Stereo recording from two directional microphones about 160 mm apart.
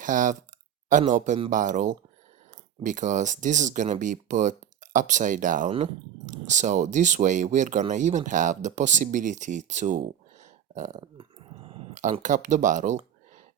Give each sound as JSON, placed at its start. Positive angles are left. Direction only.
{"t": 0.0, "sound": "speech", "side_deg": -55}
{"t": 11.0, "sound": "a sound", "side_deg": -35}
{"t": 12.2, "sound": "speech", "side_deg": -50}